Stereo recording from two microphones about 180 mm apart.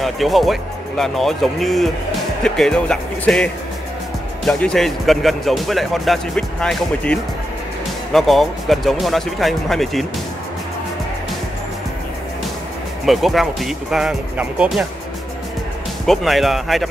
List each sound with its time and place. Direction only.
0.0 s speech: centre (ahead or behind)
4.5 s speech: 5° left (ahead or behind)
13.0 s speech: centre (ahead or behind)
16.1 s speech: centre (ahead or behind)